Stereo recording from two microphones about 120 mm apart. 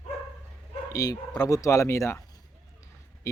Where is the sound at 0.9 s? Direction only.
30° left (ahead or behind).